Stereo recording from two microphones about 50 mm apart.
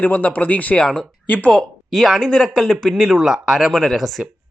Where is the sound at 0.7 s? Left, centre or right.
Centre.